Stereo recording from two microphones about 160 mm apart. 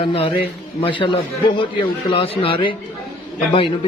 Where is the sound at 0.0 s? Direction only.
35° left (ahead or behind).